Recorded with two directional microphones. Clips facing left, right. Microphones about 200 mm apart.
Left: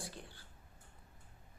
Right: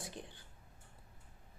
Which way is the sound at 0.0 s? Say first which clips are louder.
Right 1 dB; 20° right (ahead or behind).